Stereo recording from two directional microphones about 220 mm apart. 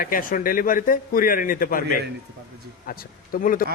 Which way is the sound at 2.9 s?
40° left (ahead or behind).